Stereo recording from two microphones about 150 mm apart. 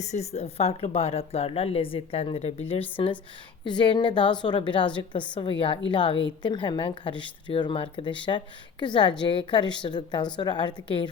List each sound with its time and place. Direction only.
0.0 s a woman's voice: 50° left (ahead or behind); by 11.1 s 30° left (ahead or behind)